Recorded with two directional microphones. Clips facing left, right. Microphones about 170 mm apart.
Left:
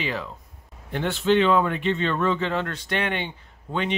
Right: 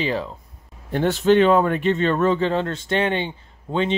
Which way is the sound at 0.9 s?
40° right (ahead or behind).